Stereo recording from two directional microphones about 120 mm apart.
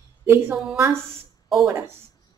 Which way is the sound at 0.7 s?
20° right (ahead or behind).